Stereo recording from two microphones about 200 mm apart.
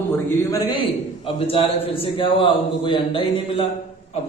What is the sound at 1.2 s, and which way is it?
A man's voice, 25° left (ahead or behind).